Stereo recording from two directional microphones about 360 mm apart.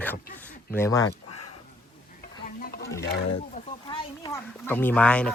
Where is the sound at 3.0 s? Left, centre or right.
Left.